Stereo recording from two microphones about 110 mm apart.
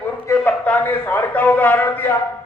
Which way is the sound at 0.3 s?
15° left (ahead or behind).